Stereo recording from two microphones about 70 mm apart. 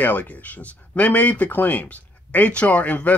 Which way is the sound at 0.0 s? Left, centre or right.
Left.